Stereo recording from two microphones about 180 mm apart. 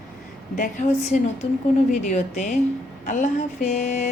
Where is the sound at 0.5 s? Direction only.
50° left (ahead or behind).